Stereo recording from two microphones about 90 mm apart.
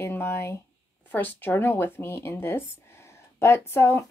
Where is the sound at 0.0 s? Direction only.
25° left (ahead or behind).